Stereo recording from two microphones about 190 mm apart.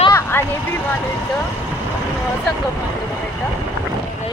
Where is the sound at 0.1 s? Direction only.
15° left (ahead or behind).